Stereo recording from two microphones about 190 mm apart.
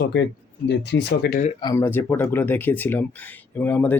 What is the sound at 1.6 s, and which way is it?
Speech, 15° left (ahead or behind).